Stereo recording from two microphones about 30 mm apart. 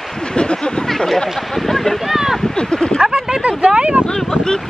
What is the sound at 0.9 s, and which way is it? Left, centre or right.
Speech, centre.